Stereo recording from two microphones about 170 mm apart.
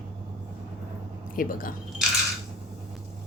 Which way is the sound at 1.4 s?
55° left (ahead or behind).